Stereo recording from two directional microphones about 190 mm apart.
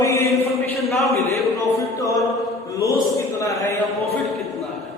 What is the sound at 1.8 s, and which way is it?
Music, 15° left (ahead or behind).